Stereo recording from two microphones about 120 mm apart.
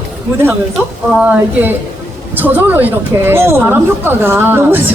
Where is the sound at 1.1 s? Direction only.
15° right (ahead or behind).